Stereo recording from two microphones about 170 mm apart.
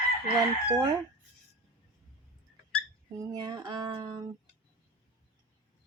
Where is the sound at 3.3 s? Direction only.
25° right (ahead or behind).